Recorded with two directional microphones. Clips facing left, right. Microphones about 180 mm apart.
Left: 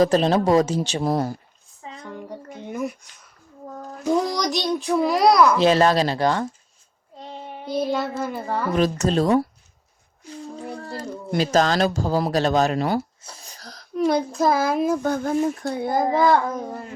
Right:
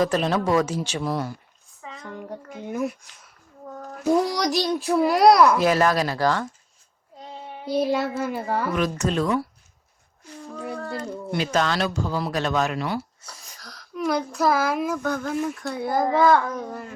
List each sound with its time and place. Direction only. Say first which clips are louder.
0.0 s speech: left 4 dB; 35° left (ahead or behind)
2.0 s a child's voice: even; centre (ahead or behind)
5.5 s a child's voice: left 3 dB; 25° left (ahead or behind)
7.6 s a child's voice: right 1 dB; 5° right (ahead or behind)
9.0 s speech: left 4 dB; 35° left (ahead or behind)
10.8 s speech: right 1 dB; 35° left (ahead or behind)
13.2 s a sound: left 3 dB; 30° left (ahead or behind)
14.1 s a child's voice: left 1 dB; 20° left (ahead or behind)